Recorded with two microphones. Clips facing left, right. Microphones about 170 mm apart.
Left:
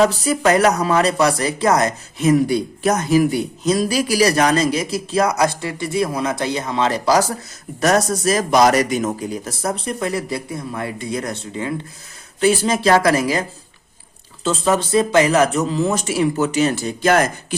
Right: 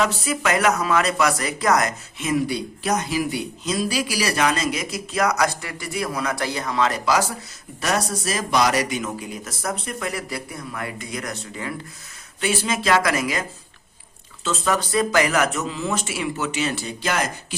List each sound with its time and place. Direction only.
0.0 s speech: 35° left (ahead or behind)
12.4 s speech: 35° left (ahead or behind)
14.4 s speech: 30° left (ahead or behind); by 17.2 s 50° left (ahead or behind)